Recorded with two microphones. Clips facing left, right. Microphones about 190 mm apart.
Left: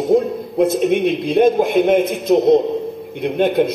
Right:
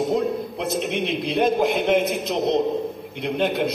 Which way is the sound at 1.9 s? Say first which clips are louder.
Left 6 dB; 50° left (ahead or behind).